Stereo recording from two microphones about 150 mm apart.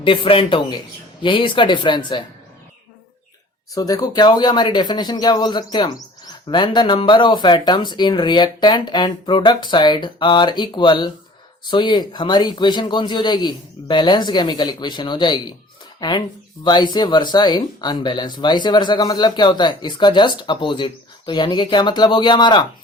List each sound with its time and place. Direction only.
0.0 s speech: 35° left (ahead or behind)
3.8 s speech: 25° left (ahead or behind)